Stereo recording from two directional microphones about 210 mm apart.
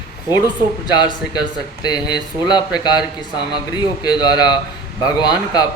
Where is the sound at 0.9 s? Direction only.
20° left (ahead or behind).